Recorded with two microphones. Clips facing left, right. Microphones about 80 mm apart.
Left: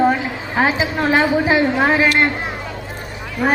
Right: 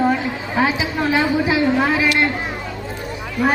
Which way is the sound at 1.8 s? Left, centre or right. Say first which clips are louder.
Left 2 dB; left.